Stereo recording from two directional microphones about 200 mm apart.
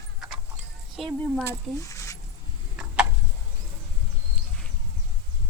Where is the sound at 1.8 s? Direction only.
15° left (ahead or behind).